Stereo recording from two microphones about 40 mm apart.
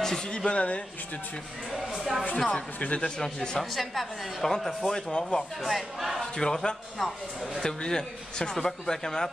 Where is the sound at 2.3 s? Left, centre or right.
Centre.